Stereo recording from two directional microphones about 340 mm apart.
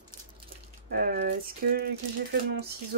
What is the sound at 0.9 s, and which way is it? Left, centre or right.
Speech, right.